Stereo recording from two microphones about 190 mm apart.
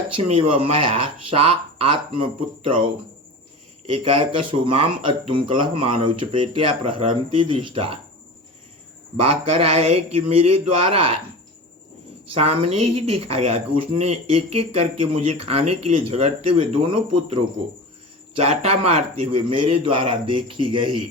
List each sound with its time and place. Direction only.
0.2 s speech: 30° right (ahead or behind)
3.9 s speech: 25° right (ahead or behind)
9.2 s speech: 30° right (ahead or behind)
12.4 s speech: 35° right (ahead or behind)